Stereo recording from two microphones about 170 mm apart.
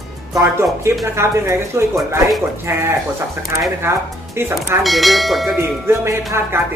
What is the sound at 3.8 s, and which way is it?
Speech, 15° right (ahead or behind).